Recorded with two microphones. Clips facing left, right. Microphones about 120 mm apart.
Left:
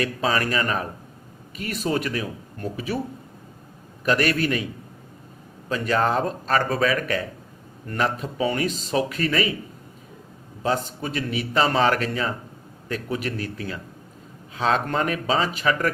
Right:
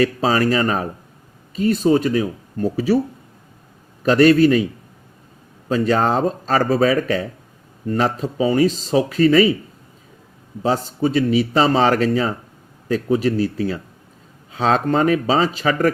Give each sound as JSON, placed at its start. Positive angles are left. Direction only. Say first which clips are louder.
{"t": 0.0, "sound": "a man's voice", "louder": "right 7 dB", "side_deg": -30}
{"t": 4.0, "sound": "a man's voice", "louder": "right 10 dB", "side_deg": -30}
{"t": 5.6, "sound": "a man's voice", "louder": "right 5 dB", "side_deg": -30}
{"t": 10.6, "sound": "a man's voice", "louder": "right 6 dB", "side_deg": -30}